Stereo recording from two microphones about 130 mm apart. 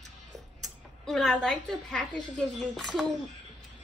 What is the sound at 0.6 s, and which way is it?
A woman's voice, centre (ahead or behind).